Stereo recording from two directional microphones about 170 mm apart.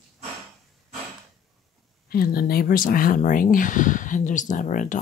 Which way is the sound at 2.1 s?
60° left (ahead or behind).